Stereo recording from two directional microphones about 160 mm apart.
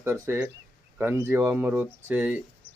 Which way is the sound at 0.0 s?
15° right (ahead or behind).